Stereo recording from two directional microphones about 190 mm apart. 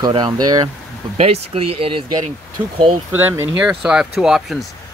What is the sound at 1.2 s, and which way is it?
Speech, 30° right (ahead or behind).